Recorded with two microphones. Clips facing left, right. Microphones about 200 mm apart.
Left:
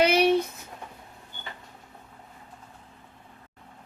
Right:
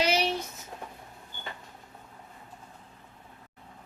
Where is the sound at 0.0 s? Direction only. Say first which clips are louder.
Left 7 dB; 60° left (ahead or behind).